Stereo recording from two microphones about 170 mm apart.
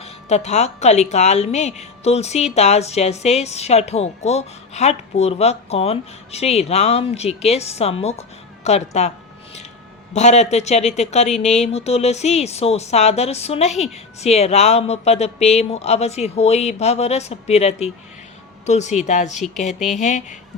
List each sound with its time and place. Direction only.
0.0 s speech: 40° left (ahead or behind)